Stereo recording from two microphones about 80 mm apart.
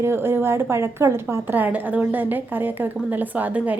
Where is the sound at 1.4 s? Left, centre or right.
Right.